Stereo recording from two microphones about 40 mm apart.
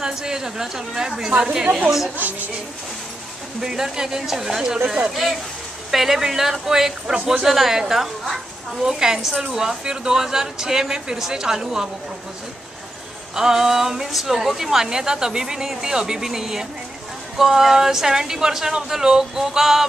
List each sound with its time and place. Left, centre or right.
0.0 s a woman's voice: centre
3.6 s a woman's voice: centre
5.1 s a woman's voice: centre
13.3 s a woman's voice: centre